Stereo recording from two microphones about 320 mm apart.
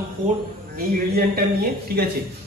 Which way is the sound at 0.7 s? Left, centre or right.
Right.